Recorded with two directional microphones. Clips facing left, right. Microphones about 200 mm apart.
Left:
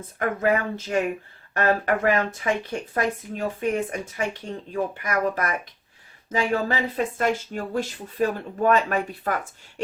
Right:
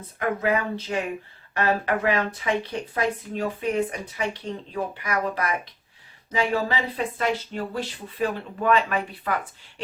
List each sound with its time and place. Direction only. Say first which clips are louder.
0.2 s speech: left 1 dB; 45° left (ahead or behind)